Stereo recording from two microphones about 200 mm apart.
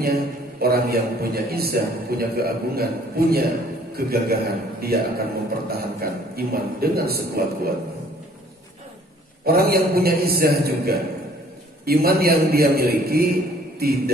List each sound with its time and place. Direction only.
0.0 s a man's voice: 50° right (ahead or behind)
9.4 s a man's voice: 50° right (ahead or behind)